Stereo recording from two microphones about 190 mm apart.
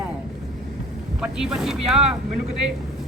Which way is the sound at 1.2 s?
5° right (ahead or behind).